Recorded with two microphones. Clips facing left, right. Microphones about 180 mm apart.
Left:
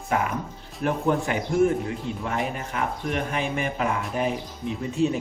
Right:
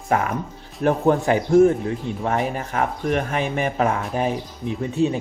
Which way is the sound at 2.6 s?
45° right (ahead or behind).